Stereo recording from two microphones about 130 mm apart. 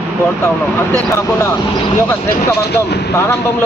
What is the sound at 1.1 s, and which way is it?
Speech, 20° left (ahead or behind).